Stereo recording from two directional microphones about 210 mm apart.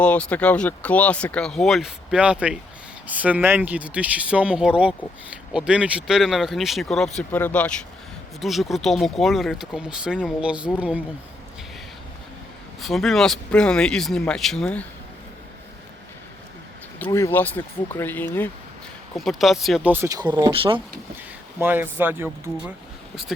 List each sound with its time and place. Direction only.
0.0 s speech: 5° left (ahead or behind)
12.8 s speech: centre (ahead or behind)
17.0 s speech: 10° left (ahead or behind); by 20.8 s 25° right (ahead or behind)
21.6 s speech: 10° right (ahead or behind)